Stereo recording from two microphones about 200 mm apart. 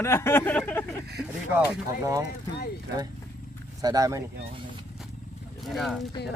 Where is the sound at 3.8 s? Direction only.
20° right (ahead or behind).